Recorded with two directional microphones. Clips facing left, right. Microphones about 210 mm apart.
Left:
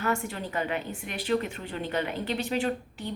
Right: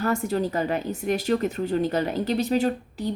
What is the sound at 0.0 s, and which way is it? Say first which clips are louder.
A woman's voice: right 6 dB; 40° right (ahead or behind).